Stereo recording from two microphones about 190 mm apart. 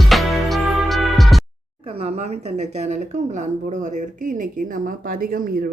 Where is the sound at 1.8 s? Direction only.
30° right (ahead or behind).